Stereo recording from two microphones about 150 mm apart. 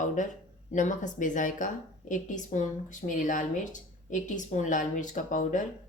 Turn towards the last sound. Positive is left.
turn(degrees=60)  # may be behind; listen again after turning